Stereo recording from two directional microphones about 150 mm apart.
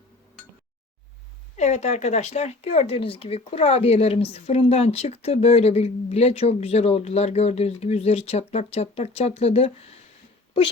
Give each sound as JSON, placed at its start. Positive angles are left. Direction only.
{"t": 1.5, "sound": "speech", "side_deg": 50}